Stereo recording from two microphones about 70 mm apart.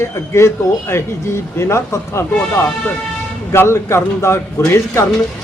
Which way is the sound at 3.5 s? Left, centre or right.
Left.